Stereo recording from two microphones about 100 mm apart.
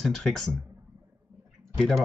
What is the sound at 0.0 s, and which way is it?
Speech, 5° left (ahead or behind).